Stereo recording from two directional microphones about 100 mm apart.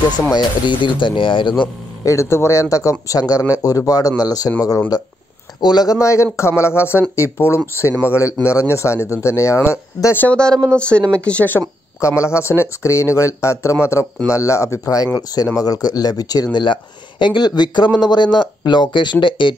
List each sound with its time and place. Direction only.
0.3 s speech: 45° left (ahead or behind)
2.0 s speech: 25° left (ahead or behind); by 5.9 s 45° left (ahead or behind)
5.9 s speech: 30° left (ahead or behind)
10.2 s speech: 10° left (ahead or behind)
12.0 s speech: 30° left (ahead or behind)
16.5 s speech: 55° left (ahead or behind)